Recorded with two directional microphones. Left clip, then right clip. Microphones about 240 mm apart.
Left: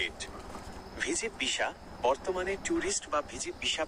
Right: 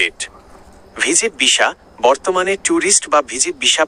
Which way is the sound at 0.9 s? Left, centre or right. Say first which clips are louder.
Right 17 dB; right.